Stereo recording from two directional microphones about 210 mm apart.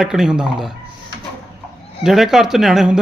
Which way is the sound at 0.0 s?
Centre (ahead or behind).